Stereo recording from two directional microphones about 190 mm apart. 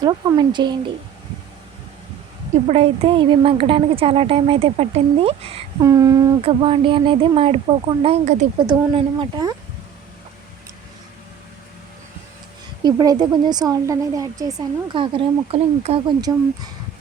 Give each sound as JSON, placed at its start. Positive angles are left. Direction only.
{"t": 0.0, "sound": "speech", "side_deg": -20}
{"t": 2.6, "sound": "speech", "side_deg": -30}
{"t": 5.8, "sound": "a sound", "side_deg": -20}
{"t": 6.4, "sound": "speech", "side_deg": -30}
{"t": 8.5, "sound": "speech", "side_deg": -25}
{"t": 12.8, "sound": "speech", "side_deg": -20}